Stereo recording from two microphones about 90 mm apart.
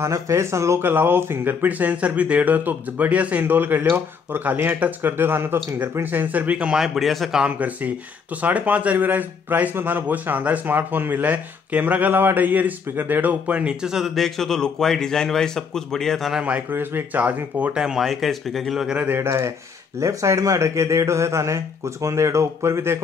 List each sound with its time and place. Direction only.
0.0 s speech: 30° right (ahead or behind); by 7.5 s 5° right (ahead or behind)
7.5 s speech: 15° right (ahead or behind); by 16.4 s centre (ahead or behind)
16.4 s speech: 20° right (ahead or behind); by 18.9 s centre (ahead or behind)
18.9 s speech: 25° right (ahead or behind)